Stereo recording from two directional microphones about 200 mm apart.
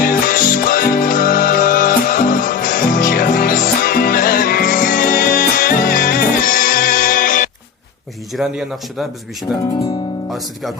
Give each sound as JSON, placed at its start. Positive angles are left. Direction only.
{"t": 0.0, "sound": "music", "side_deg": 45}
{"t": 8.3, "sound": "speech", "side_deg": 0}